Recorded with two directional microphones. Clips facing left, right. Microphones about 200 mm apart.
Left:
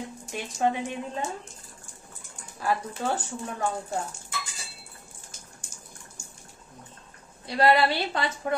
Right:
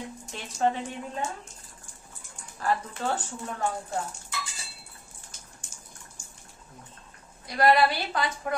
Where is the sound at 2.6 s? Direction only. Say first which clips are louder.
Left 1 dB; 10° left (ahead or behind).